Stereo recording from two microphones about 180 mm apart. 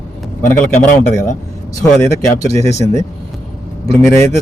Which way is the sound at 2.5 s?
15° left (ahead or behind).